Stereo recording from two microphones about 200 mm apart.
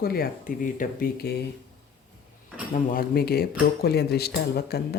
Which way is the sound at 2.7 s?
45° left (ahead or behind).